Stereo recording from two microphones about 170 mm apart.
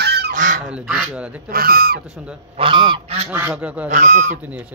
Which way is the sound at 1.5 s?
60° right (ahead or behind).